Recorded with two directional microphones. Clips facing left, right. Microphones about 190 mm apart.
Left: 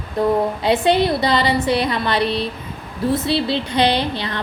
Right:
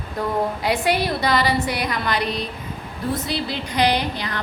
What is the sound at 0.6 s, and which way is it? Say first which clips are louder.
A woman's voice: left 6 dB; 25° left (ahead or behind).